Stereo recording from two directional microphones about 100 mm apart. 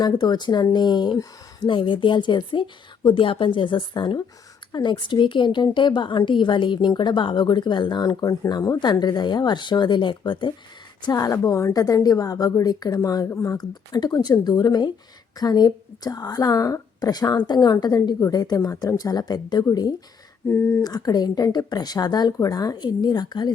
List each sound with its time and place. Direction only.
0.0 s a woman's voice: 45° left (ahead or behind)
11.0 s a woman's voice: 35° left (ahead or behind)
13.6 s a woman's voice: 45° left (ahead or behind)
20.5 s speech: 25° left (ahead or behind)
20.8 s a woman's voice: 40° left (ahead or behind)